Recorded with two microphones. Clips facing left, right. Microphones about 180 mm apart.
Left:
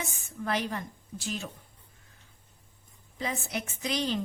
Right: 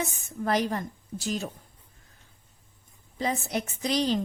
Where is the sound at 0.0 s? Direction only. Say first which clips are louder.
Right 5 dB; 40° right (ahead or behind).